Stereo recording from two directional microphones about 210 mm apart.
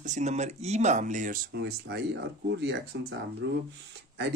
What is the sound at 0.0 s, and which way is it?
Speech, 35° right (ahead or behind).